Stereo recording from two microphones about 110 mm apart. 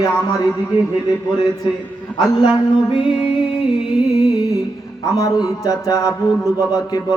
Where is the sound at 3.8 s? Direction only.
Centre (ahead or behind).